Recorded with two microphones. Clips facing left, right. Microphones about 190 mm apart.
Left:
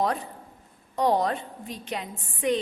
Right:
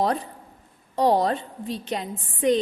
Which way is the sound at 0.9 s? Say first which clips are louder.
Right 3 dB; 35° right (ahead or behind).